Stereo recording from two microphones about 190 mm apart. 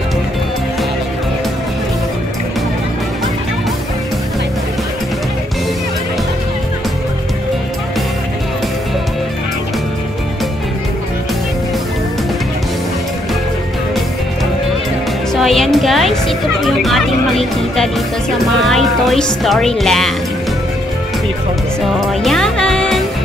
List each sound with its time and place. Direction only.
15.3 s music: centre (ahead or behind)
18.6 s speech: centre (ahead or behind)
22.2 s music: centre (ahead or behind)